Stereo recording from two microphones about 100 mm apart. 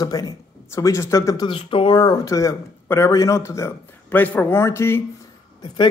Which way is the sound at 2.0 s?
40° left (ahead or behind).